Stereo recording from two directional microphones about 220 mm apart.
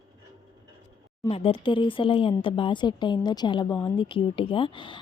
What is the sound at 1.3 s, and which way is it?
A woman's voice, 25° left (ahead or behind).